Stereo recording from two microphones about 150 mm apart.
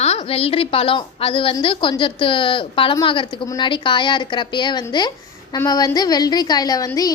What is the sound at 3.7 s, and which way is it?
A woman's voice, 30° left (ahead or behind).